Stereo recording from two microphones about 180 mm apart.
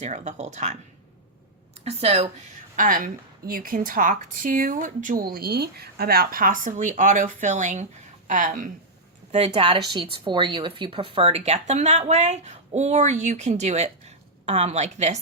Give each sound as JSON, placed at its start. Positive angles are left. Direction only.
{"t": 0.0, "sound": "speech", "side_deg": -40}
{"t": 1.8, "sound": "speech", "side_deg": -35}
{"t": 2.7, "sound": "a woman's voice", "side_deg": -50}
{"t": 9.5, "sound": "speech", "side_deg": -25}